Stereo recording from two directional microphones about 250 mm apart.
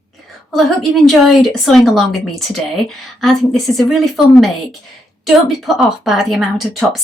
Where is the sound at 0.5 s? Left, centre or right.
Centre.